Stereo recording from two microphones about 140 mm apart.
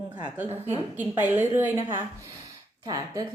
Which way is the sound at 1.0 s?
15° right (ahead or behind).